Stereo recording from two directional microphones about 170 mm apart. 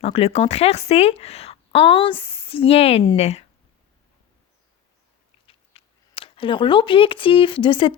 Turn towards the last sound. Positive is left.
turn(degrees=30)  # may be behind; listen again after turning